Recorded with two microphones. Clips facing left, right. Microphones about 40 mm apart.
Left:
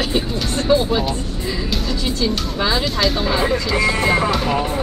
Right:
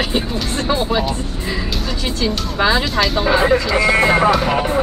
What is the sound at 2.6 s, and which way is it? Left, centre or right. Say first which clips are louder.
Speech: right 5 dB; right.